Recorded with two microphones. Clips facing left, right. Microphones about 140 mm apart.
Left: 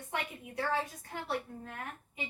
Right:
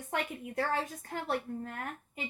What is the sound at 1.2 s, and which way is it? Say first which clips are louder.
Speech: right 3 dB; 50° right (ahead or behind).